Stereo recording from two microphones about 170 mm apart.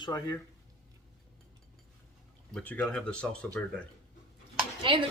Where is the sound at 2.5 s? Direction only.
10° left (ahead or behind).